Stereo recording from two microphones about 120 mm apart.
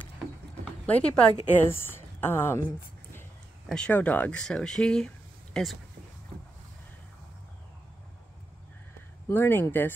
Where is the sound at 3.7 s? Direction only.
10° left (ahead or behind).